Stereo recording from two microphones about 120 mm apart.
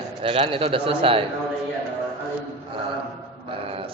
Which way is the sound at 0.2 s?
50° right (ahead or behind).